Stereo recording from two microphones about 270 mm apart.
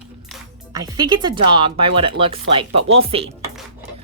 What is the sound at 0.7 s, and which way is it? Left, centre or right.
Speech, centre.